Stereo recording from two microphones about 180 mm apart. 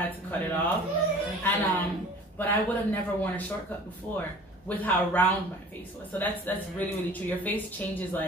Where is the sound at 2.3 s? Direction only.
10° left (ahead or behind).